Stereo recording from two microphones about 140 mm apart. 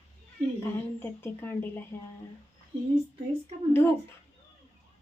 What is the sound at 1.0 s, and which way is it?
Speech, 15° left (ahead or behind).